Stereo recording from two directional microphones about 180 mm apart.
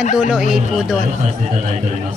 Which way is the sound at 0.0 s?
45° left (ahead or behind).